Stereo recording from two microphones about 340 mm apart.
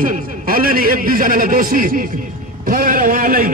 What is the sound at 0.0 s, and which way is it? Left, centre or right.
A man's voice, right.